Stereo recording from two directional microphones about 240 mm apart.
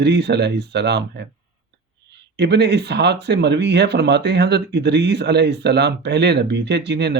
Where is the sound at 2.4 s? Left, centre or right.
Right.